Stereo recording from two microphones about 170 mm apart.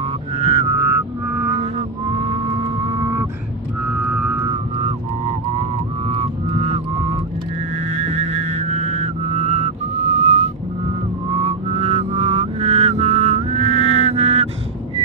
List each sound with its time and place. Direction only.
0.4 s music: 25° right (ahead or behind)
1.6 s vehicle: 35° right (ahead or behind)
3.0 s vehicle: 15° right (ahead or behind)
3.9 s a sound: 5° right (ahead or behind)
4.5 s vehicle: 35° right (ahead or behind)
6.0 s music: 35° right (ahead or behind)
7.9 s vehicle: 35° right (ahead or behind)
10.1 s whistling: 40° right (ahead or behind)
11.3 s vehicle: 35° right (ahead or behind)